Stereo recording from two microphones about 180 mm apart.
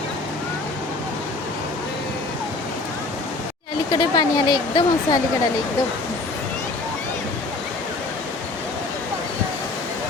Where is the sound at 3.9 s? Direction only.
25° left (ahead or behind).